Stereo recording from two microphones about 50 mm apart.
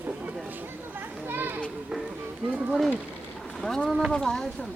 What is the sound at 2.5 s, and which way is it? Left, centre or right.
Speech, right.